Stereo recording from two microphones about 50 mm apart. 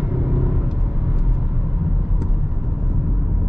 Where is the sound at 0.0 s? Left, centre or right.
Right.